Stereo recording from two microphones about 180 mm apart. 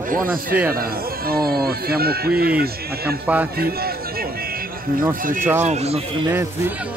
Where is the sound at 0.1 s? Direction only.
50° right (ahead or behind).